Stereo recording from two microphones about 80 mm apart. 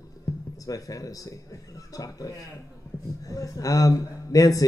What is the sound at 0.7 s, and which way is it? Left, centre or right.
Speech, left.